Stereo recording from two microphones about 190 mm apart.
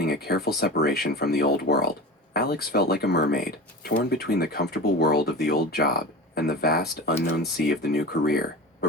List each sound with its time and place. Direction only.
0.0 s speech: 55° left (ahead or behind)